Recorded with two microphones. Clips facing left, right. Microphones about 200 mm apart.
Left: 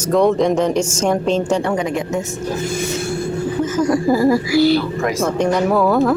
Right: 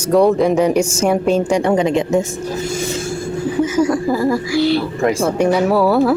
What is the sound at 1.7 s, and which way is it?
Speech, 25° right (ahead or behind).